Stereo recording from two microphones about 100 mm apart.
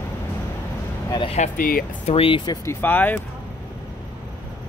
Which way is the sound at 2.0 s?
70° left (ahead or behind).